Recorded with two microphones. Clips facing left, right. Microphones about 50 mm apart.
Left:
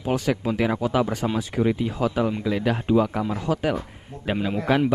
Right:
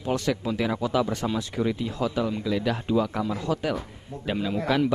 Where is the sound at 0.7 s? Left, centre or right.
Left.